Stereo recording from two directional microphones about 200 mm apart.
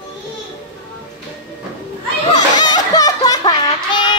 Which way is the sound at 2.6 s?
20° left (ahead or behind).